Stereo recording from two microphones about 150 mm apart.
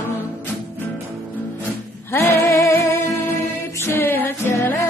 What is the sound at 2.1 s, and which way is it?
Music, 15° left (ahead or behind).